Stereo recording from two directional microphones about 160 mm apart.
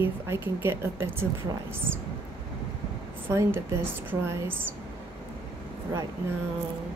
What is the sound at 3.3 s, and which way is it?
A woman's voice, 15° right (ahead or behind).